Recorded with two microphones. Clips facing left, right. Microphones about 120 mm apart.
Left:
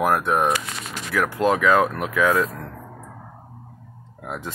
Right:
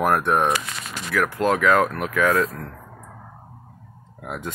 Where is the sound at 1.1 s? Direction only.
25° left (ahead or behind).